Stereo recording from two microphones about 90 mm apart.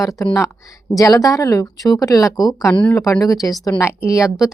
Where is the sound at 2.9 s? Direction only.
30° left (ahead or behind).